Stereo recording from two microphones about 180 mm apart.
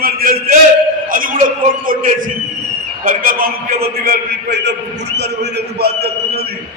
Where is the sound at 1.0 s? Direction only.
50° right (ahead or behind).